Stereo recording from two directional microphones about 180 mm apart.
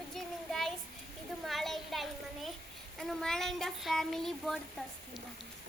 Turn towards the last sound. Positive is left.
turn(degrees=0)  # may be behind; listen again after turning